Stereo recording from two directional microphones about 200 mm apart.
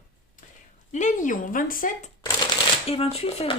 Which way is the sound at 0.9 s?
40° left (ahead or behind).